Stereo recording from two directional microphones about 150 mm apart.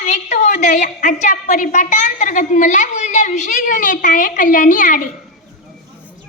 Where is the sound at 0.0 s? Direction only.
55° left (ahead or behind).